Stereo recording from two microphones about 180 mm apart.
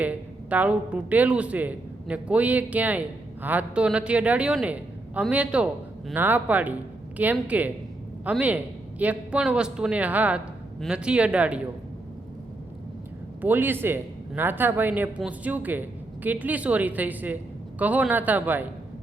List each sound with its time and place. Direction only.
0.0 s speech: 10° right (ahead or behind)
13.4 s speech: 10° right (ahead or behind)